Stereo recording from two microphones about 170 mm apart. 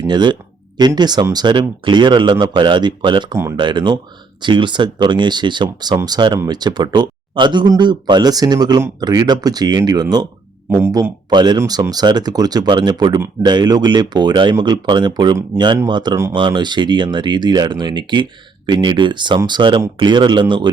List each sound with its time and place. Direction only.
0.0 s speech: 25° right (ahead or behind)
11.3 s speech: 25° right (ahead or behind)